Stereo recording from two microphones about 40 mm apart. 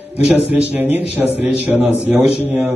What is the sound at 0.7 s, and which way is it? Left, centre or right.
Speech, right.